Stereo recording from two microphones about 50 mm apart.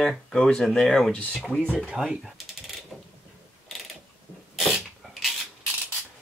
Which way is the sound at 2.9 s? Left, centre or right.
Centre.